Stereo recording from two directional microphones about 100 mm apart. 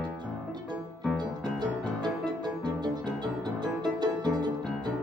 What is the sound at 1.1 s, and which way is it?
Music, 45° right (ahead or behind).